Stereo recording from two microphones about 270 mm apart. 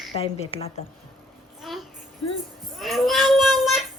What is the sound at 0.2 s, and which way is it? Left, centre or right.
Speech, left.